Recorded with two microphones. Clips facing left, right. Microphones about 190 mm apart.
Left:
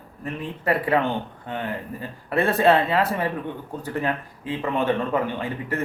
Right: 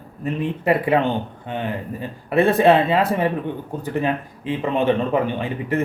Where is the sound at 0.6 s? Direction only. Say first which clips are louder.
Right 3 dB; 20° right (ahead or behind).